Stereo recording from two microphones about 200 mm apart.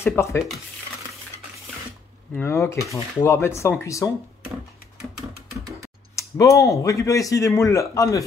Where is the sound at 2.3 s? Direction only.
10° left (ahead or behind).